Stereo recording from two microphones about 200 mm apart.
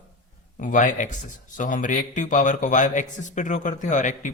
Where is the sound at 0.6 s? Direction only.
40° left (ahead or behind).